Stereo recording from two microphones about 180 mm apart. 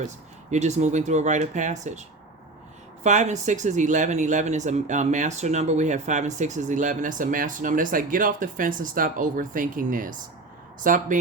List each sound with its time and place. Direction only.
0.5 s speech: 40° right (ahead or behind)